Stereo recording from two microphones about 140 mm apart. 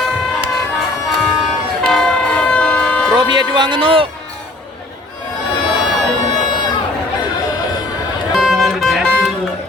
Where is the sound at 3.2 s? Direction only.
30° right (ahead or behind).